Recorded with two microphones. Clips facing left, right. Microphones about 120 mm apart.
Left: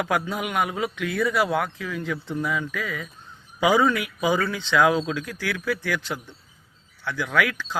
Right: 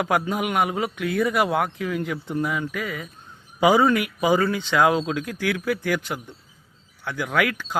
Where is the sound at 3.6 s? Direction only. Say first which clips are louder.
Right 2 dB; 35° right (ahead or behind).